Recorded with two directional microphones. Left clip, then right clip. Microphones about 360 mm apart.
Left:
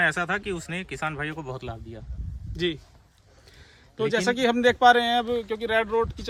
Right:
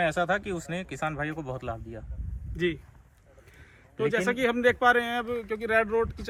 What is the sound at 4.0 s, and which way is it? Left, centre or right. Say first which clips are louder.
Speech: left 2 dB; left.